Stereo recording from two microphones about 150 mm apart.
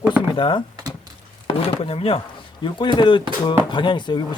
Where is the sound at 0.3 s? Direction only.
35° left (ahead or behind).